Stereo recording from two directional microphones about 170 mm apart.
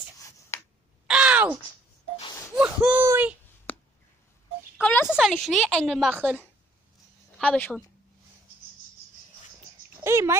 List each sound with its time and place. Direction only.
0.5 s a sound: 15° left (ahead or behind)
1.0 s crow: 5° right (ahead or behind)
2.5 s a sound: 10° right (ahead or behind)
5.0 s a woman's voice: centre (ahead or behind)
7.3 s a woman's voice: 10° left (ahead or behind)
10.0 s dog: 15° right (ahead or behind)